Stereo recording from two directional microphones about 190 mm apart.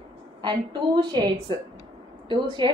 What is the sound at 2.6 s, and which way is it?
Speech, 25° right (ahead or behind).